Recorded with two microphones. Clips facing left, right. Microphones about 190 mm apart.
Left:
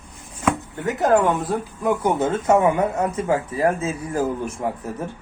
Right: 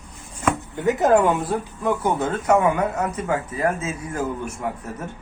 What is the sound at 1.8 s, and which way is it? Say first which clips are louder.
Speech: left 2 dB; 20° left (ahead or behind).